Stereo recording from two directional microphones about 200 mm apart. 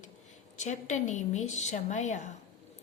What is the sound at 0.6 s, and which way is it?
A woman's voice, 35° left (ahead or behind).